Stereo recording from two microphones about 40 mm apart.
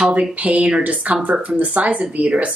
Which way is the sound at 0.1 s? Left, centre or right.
Right.